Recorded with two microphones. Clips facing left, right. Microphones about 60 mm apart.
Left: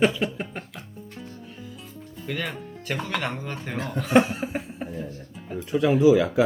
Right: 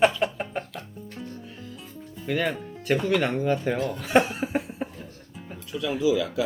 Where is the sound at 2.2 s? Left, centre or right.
Centre.